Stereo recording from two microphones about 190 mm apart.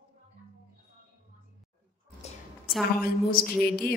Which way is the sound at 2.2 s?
35° left (ahead or behind).